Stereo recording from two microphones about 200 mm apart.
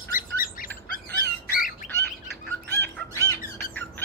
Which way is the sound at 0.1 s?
45° left (ahead or behind).